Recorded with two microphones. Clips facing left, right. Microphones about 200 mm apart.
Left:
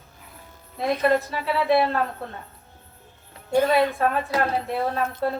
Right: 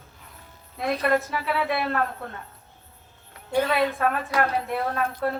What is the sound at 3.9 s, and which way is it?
Speech, 30° left (ahead or behind).